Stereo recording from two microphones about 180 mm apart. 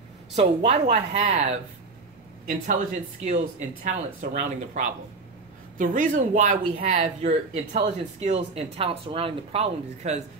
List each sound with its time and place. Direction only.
0.4 s speech: 35° right (ahead or behind)
5.8 s speech: 45° right (ahead or behind)